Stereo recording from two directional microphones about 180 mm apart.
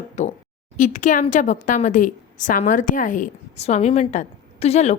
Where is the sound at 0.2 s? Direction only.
40° left (ahead or behind).